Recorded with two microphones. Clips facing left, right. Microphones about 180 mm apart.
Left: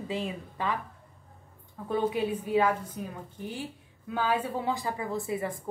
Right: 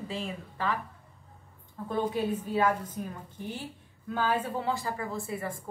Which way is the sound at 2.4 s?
15° left (ahead or behind).